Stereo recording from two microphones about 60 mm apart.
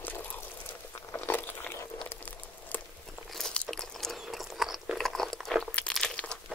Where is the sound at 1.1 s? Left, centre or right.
Left.